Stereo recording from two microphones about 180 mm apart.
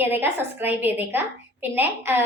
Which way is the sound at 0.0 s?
10° right (ahead or behind).